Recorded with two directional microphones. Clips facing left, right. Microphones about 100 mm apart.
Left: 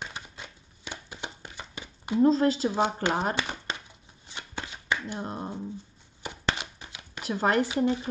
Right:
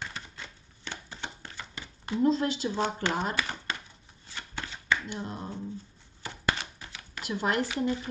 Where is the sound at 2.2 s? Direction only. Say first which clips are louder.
Left 3 dB; 40° left (ahead or behind).